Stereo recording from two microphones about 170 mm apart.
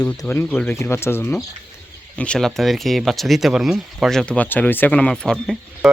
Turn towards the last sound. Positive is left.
turn(degrees=0)  # may be behind; listen again after turning